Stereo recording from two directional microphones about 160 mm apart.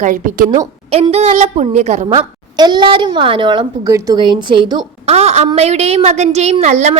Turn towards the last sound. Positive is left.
turn(degrees=-45)  # may be behind; listen again after turning